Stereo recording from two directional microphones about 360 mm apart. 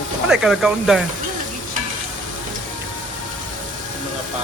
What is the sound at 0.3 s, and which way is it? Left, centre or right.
Speech, centre.